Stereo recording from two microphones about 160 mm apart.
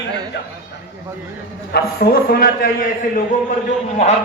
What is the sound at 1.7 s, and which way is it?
A man's voice, 75° left (ahead or behind).